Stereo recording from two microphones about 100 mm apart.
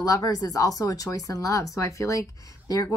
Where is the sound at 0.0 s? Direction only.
35° left (ahead or behind).